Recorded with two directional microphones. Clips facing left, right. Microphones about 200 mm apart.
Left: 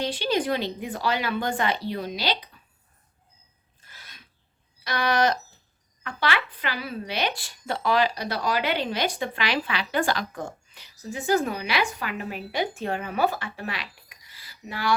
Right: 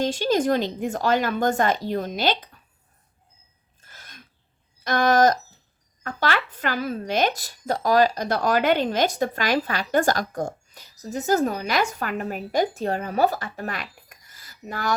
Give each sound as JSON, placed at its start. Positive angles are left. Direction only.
{"t": 0.0, "sound": "a woman's voice", "side_deg": -45}
{"t": 3.8, "sound": "sneeze", "side_deg": -45}
{"t": 4.8, "sound": "a woman's voice", "side_deg": -45}